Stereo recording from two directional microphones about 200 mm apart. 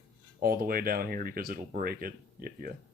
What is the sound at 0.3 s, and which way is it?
Speech, 45° right (ahead or behind).